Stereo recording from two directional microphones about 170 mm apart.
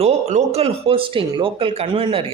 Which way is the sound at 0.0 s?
40° right (ahead or behind).